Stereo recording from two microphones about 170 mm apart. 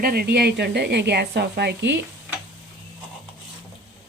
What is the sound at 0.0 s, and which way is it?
A woman's voice, 65° right (ahead or behind).